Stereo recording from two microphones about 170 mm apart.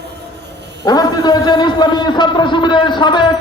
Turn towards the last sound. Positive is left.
turn(degrees=25)  # may be behind; listen again after turning